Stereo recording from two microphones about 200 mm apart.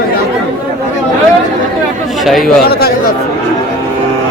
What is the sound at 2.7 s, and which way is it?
Chatter, 50° left (ahead or behind).